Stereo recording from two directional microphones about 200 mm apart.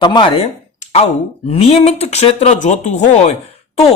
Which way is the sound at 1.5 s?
30° left (ahead or behind).